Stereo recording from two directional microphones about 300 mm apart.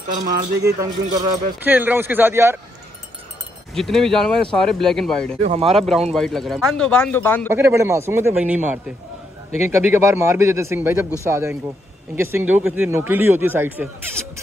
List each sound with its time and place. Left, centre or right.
0.2 s a man's voice: right
1.1 s speech: centre
3.7 s speech: centre
5.4 s a man's voice: right
5.8 s speech: centre
7.4 s speech: centre